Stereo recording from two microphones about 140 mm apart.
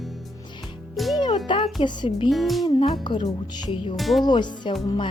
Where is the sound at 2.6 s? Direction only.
35° left (ahead or behind).